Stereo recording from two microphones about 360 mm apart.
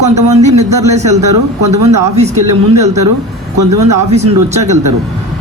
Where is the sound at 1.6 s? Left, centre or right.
Right.